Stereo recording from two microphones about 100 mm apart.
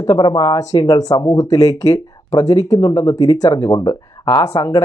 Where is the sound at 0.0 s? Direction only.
45° left (ahead or behind).